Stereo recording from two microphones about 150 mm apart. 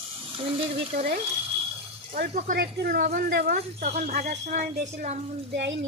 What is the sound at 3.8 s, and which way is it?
A woman's voice, 50° right (ahead or behind).